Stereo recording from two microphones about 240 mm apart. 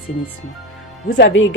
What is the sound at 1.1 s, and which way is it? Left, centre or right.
Speech, left.